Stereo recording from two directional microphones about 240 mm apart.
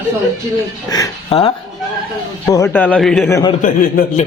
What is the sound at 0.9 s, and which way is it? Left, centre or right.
Speech, centre.